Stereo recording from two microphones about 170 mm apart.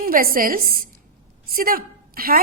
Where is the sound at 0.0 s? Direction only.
60° right (ahead or behind).